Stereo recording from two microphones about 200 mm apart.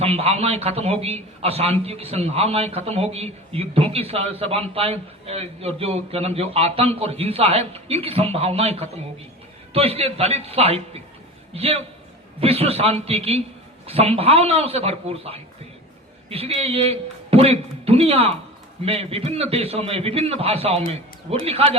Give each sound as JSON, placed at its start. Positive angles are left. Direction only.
{"t": 0.0, "sound": "a man's voice", "side_deg": -30}